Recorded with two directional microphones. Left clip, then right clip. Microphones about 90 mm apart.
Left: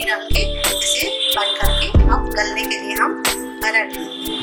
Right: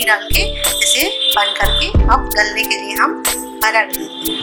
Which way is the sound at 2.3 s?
25° right (ahead or behind).